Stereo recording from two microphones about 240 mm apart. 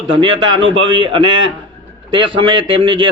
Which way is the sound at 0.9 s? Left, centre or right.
Centre.